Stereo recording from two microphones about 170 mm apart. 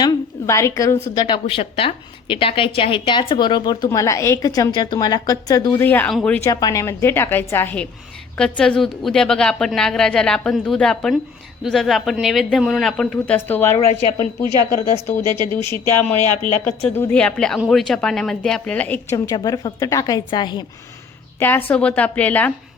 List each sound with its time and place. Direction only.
0.0 s a woman's voice: 20° left (ahead or behind)
6.4 s a woman's voice: 20° left (ahead or behind)
13.7 s a woman's voice: 40° left (ahead or behind)
14.4 s speech: 25° right (ahead or behind)
15.6 s a woman's voice: 15° left (ahead or behind)
16.3 s speech: 45° left (ahead or behind)
16.8 s a woman's voice: 5° left (ahead or behind)
19.1 s a woman's voice: 20° left (ahead or behind)
21.3 s a woman's voice: 10° left (ahead or behind)